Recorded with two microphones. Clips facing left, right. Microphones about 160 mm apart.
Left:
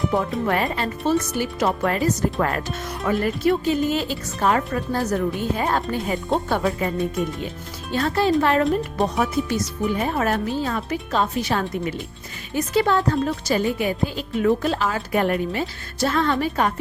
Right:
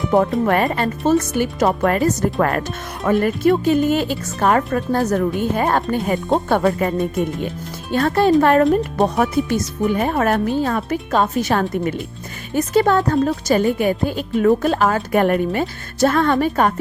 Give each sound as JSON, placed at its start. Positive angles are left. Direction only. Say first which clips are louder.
{"t": 0.4, "sound": "speech", "louder": "right 5 dB", "side_deg": -50}
{"t": 7.9, "sound": "speech", "louder": "right 5 dB", "side_deg": -55}